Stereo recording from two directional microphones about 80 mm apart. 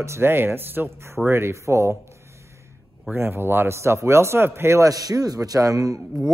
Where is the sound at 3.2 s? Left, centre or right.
Right.